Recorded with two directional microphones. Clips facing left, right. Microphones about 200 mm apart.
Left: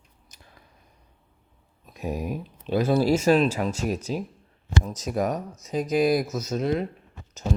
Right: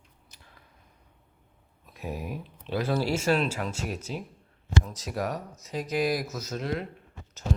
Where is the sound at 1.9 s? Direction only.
15° left (ahead or behind).